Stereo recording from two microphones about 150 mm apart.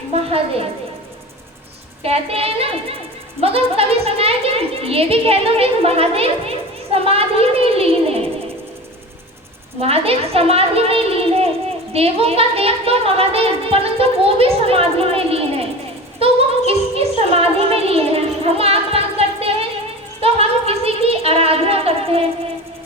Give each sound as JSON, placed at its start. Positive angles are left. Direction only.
{"t": 0.3, "sound": "speech", "side_deg": -40}
{"t": 2.0, "sound": "speech", "side_deg": -40}
{"t": 9.8, "sound": "speech", "side_deg": -40}
{"t": 16.2, "sound": "music", "side_deg": -40}
{"t": 20.2, "sound": "a sound", "side_deg": -40}